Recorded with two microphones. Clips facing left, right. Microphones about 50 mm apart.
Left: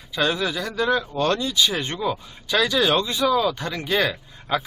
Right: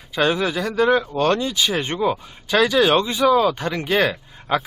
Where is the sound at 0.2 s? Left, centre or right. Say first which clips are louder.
Right 3 dB; centre.